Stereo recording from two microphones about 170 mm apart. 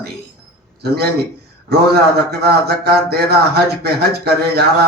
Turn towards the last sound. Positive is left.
turn(degrees=-70)  # may be behind; listen again after turning